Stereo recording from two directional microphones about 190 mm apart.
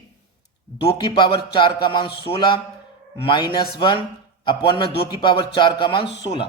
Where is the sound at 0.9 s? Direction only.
25° left (ahead or behind).